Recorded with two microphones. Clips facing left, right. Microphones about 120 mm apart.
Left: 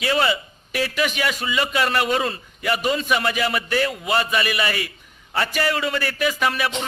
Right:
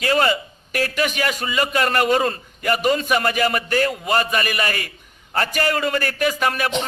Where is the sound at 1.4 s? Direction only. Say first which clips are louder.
Right 2 dB; 45° right (ahead or behind).